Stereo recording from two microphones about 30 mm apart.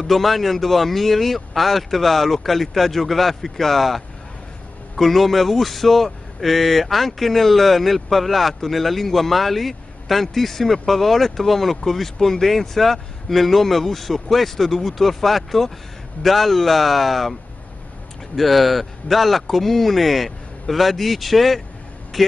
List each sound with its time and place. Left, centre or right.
0.0 s speech: centre